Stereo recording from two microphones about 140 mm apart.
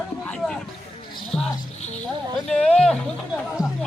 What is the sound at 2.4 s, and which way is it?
Speech, 5° left (ahead or behind).